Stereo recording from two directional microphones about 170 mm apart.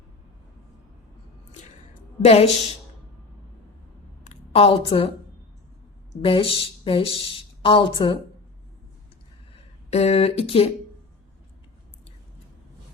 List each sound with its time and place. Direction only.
2.2 s speech: 35° left (ahead or behind)
4.3 s a woman's voice: 35° left (ahead or behind)
6.2 s speech: 30° left (ahead or behind)
9.5 s speech: 40° left (ahead or behind)